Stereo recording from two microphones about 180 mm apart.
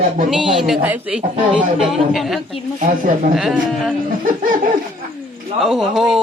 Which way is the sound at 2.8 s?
45° right (ahead or behind).